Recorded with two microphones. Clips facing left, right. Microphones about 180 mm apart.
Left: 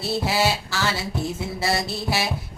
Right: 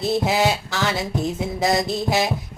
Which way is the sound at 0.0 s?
20° right (ahead or behind).